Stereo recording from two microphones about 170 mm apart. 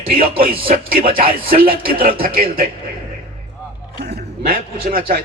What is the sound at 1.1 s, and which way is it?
Speech, 60° right (ahead or behind).